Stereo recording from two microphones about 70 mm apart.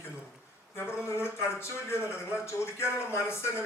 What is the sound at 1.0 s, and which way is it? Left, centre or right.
Speech, left.